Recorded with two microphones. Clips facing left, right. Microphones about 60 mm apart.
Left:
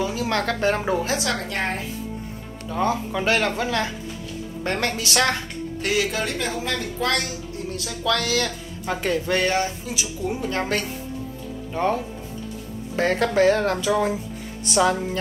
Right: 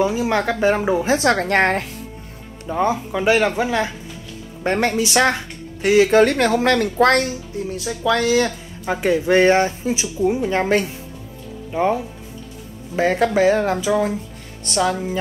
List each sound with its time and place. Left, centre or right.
0.0 s speech: centre
1.0 s a woman's voice: right
1.6 s speech: right
2.7 s speech: centre
6.1 s speech: right
7.8 s speech: centre
9.4 s speech: right
10.2 s speech: centre
11.7 s speech: centre
14.0 s music: centre